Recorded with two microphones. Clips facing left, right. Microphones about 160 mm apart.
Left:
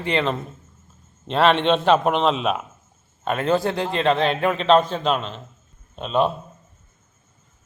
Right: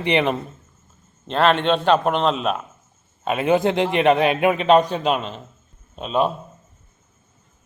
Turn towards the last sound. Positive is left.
turn(degrees=-5)  # may be behind; listen again after turning